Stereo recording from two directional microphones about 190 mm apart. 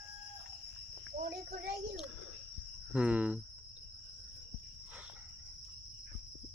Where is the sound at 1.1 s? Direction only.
50° right (ahead or behind).